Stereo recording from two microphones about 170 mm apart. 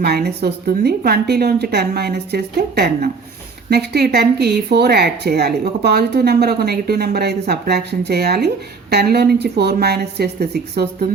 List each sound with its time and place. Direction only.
0.0 s speech: 70° right (ahead or behind)